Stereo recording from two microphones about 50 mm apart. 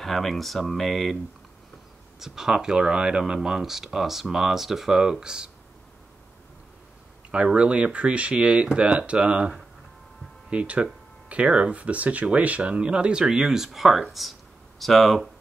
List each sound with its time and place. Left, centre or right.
0.0 s speech: centre
2.1 s speech: centre
7.2 s speech: right
10.5 s speech: right; by 15.2 s centre